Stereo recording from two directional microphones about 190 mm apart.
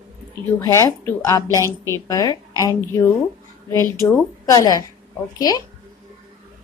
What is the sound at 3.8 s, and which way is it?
Speech, 20° right (ahead or behind).